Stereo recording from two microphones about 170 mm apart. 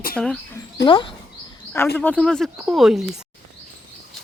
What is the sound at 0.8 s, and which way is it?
Speech, 30° left (ahead or behind).